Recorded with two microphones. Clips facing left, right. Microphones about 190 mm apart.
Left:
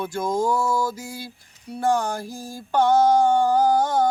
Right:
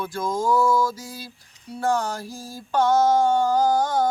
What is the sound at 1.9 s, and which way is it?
Mantra, 15° left (ahead or behind).